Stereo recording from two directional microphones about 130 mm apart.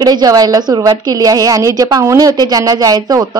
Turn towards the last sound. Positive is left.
turn(degrees=-30)  # may be behind; listen again after turning